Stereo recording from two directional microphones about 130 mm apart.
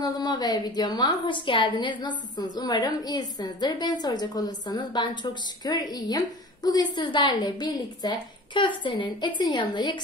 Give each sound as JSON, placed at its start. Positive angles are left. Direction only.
{"t": 0.0, "sound": "a woman's voice", "side_deg": 30}